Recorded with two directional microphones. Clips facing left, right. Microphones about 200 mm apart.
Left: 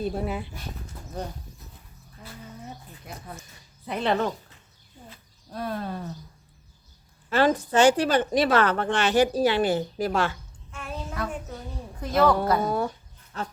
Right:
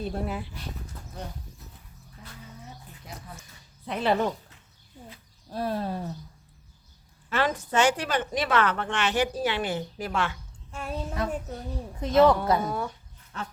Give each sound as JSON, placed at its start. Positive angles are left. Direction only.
{"t": 0.0, "sound": "speech", "side_deg": 0}
{"t": 3.1, "sound": "speech", "side_deg": 55}
{"t": 3.8, "sound": "speech", "side_deg": -5}
{"t": 5.5, "sound": "speech", "side_deg": -30}
{"t": 7.3, "sound": "a woman's voice", "side_deg": 35}
{"t": 10.7, "sound": "a child's voice", "side_deg": -35}
{"t": 12.0, "sound": "speech", "side_deg": -20}
{"t": 12.6, "sound": "a woman's voice", "side_deg": 35}